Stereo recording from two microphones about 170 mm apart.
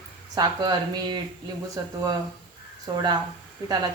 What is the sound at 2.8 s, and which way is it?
Speech, 25° right (ahead or behind).